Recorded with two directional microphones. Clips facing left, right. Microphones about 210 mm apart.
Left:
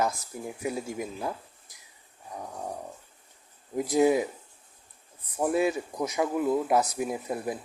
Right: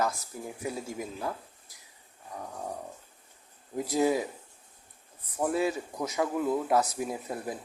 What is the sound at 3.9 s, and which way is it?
Speech, 20° left (ahead or behind).